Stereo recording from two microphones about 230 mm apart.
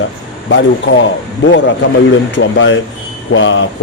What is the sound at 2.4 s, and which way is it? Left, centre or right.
A man's voice, left.